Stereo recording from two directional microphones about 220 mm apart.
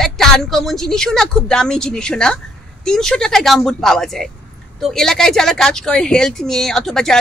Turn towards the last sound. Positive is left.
turn(degrees=0)  # may be behind; listen again after turning